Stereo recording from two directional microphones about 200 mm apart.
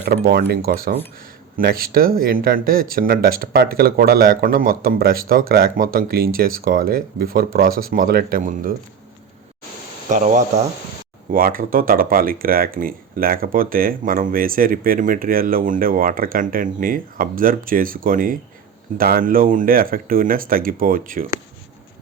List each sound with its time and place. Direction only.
0.0 s speech: 50° right (ahead or behind)
10.1 s speech: 40° right (ahead or behind)